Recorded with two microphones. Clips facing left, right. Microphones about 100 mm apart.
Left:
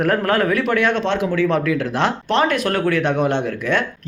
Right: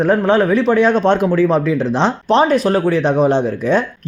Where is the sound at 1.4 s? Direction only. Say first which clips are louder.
Right 4 dB; 30° right (ahead or behind).